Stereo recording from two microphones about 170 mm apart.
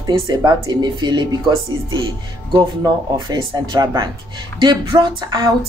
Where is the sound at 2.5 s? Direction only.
20° right (ahead or behind).